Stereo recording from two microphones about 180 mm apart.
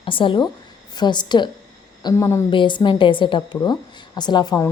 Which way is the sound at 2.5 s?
25° left (ahead or behind).